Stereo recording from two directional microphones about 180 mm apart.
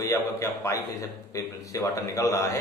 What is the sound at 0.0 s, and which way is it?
A man's voice, 15° left (ahead or behind).